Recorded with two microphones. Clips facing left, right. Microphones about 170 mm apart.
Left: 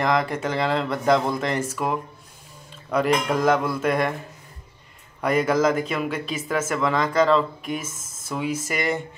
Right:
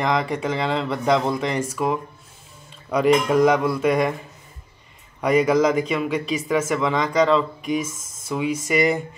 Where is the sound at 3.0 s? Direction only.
Centre (ahead or behind).